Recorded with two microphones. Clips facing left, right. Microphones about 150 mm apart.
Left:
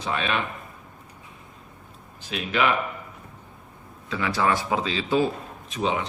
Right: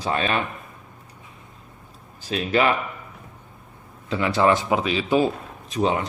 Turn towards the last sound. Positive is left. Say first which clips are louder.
# right 4 dB
turn(degrees=-45)  # may be behind; listen again after turning